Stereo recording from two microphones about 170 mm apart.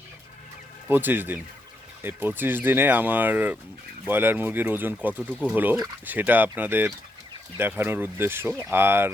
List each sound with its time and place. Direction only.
0.9 s speech: 10° right (ahead or behind)